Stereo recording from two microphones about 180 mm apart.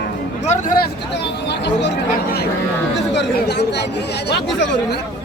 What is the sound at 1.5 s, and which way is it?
Speech, 70° left (ahead or behind).